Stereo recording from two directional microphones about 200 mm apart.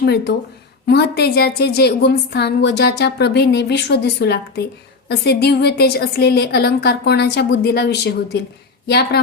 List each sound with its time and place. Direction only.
0.0 s a woman's voice: 55° left (ahead or behind)